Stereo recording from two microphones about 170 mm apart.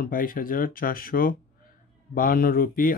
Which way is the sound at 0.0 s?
55° left (ahead or behind).